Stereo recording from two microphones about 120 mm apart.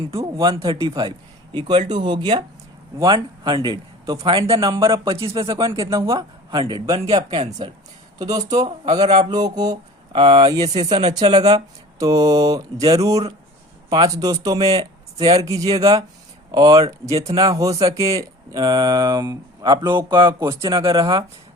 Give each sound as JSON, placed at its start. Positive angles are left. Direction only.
{"t": 0.1, "sound": "speech", "side_deg": -30}
{"t": 4.2, "sound": "speech", "side_deg": -50}
{"t": 5.5, "sound": "speech", "side_deg": -30}
{"t": 8.2, "sound": "speech", "side_deg": -30}
{"t": 11.9, "sound": "speech", "side_deg": -30}